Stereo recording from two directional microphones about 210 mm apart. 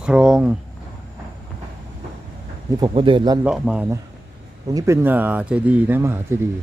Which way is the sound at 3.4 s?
5° right (ahead or behind).